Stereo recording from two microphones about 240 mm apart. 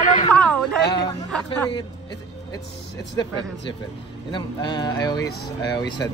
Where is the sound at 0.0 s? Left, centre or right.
Left.